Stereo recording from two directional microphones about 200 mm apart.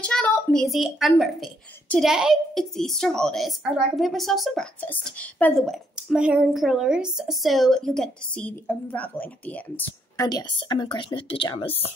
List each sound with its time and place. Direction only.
0.0 s a child's voice: 5° left (ahead or behind); by 11.7 s 25° left (ahead or behind)